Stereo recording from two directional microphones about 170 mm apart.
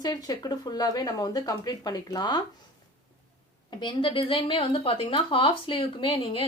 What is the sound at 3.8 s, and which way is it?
Speech, 30° left (ahead or behind).